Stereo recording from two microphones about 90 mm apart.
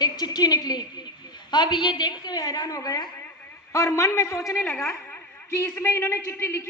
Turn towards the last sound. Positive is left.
turn(degrees=30)  # may be behind; listen again after turning